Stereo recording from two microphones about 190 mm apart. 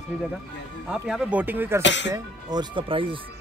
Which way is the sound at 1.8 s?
70° left (ahead or behind).